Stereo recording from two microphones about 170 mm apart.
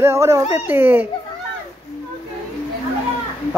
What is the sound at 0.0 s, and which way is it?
Speech, 15° right (ahead or behind).